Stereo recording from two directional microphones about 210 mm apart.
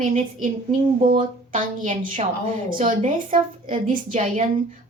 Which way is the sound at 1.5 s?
40° right (ahead or behind).